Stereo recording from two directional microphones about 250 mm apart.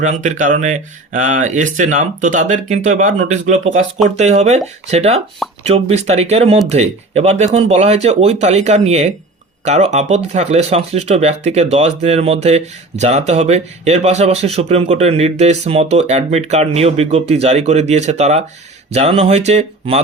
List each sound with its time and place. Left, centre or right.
0.0 s speech: right